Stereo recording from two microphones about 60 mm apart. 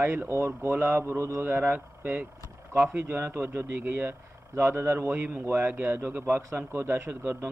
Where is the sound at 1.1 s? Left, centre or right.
Right.